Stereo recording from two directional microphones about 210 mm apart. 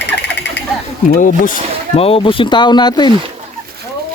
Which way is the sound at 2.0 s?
25° left (ahead or behind).